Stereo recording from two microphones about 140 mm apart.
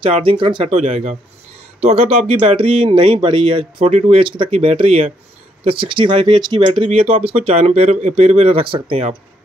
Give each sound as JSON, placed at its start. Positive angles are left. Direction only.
{"t": 0.0, "sound": "speech", "side_deg": -40}
{"t": 0.7, "sound": "speech", "side_deg": -55}